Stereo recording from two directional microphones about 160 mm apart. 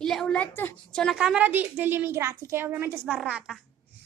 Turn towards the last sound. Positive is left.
turn(degrees=-5)  # may be behind; listen again after turning